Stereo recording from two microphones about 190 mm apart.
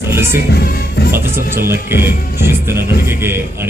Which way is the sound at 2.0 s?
55° left (ahead or behind).